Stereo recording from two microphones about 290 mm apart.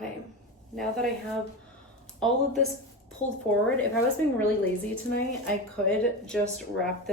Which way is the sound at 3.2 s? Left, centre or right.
Left.